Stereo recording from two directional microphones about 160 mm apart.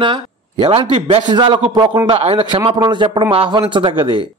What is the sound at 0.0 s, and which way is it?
A man's voice, 30° right (ahead or behind).